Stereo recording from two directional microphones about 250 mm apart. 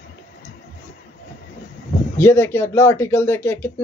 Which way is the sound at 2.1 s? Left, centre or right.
Centre.